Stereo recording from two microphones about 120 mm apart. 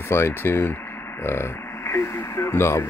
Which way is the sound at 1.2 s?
20° left (ahead or behind).